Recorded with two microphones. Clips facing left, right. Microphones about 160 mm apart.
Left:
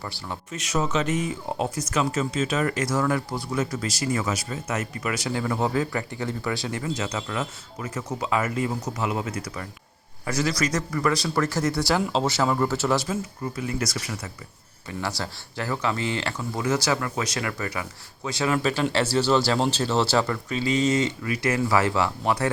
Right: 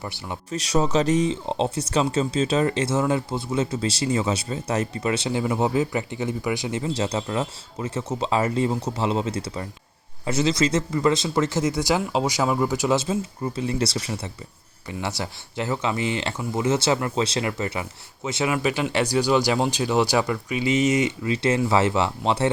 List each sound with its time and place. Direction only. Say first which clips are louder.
0.0 s speech: right 2 dB; 20° right (ahead or behind)
0.5 s speech: right 4 dB; 35° right (ahead or behind)